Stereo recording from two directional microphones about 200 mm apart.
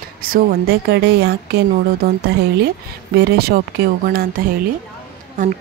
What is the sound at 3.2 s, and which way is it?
A child's voice, 55° right (ahead or behind).